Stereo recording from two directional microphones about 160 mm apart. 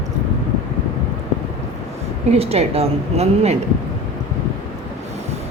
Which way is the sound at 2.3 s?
40° right (ahead or behind).